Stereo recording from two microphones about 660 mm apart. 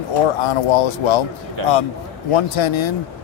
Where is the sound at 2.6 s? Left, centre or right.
Left.